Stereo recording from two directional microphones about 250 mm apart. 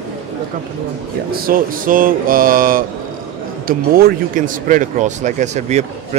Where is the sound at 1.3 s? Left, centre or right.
Right.